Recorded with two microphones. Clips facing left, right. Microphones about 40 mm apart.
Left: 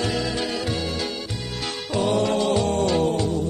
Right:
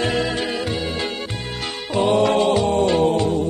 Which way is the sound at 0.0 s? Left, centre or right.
Right.